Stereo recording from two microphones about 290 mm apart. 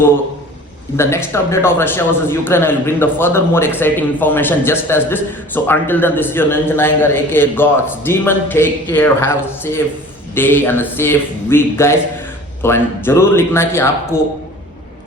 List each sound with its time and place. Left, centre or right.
0.9 s a man's voice: centre